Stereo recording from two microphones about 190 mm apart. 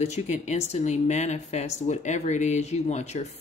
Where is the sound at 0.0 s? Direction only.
35° left (ahead or behind).